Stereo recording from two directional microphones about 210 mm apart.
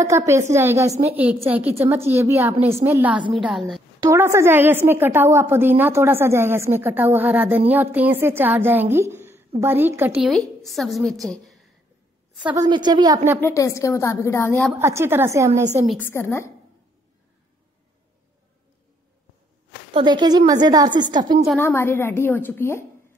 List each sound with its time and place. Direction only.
0.0 s a woman's voice: 15° right (ahead or behind)
3.2 s a woman's voice: 25° right (ahead or behind)
3.4 s a woman's voice: centre (ahead or behind)
4.0 s a woman's voice: 15° right (ahead or behind)
12.5 s a woman's voice: 20° right (ahead or behind)
13.4 s a woman's voice: 15° left (ahead or behind)
14.7 s a woman's voice: 10° right (ahead or behind)
15.9 s a woman's voice: 10° left (ahead or behind)
19.9 s a woman's voice: 20° right (ahead or behind)
21.5 s a woman's voice: 10° left (ahead or behind)